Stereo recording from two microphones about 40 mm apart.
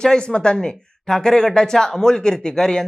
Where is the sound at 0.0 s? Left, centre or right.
Centre.